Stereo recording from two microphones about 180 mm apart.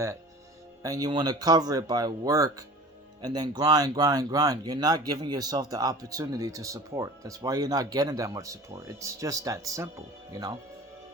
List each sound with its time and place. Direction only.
0.8 s speech: 20° right (ahead or behind)